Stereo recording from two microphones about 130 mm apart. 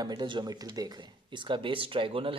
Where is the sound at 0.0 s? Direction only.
35° right (ahead or behind).